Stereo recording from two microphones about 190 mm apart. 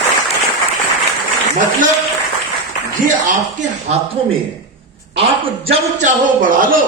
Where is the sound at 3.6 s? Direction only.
35° right (ahead or behind).